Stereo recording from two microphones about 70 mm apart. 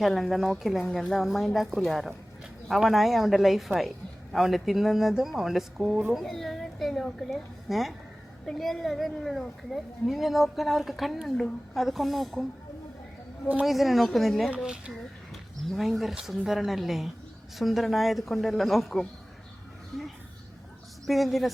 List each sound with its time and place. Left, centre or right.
0.0 s speech: centre
13.7 s speech: centre
21.1 s speech: centre